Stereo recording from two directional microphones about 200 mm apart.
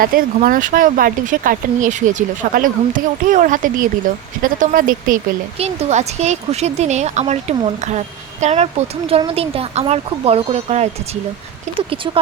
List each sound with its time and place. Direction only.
0.0 s speech: 45° right (ahead or behind)
12.0 s speech: 25° right (ahead or behind)